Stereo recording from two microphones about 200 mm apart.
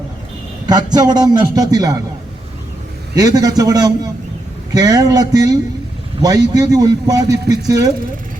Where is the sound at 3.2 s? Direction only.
20° right (ahead or behind).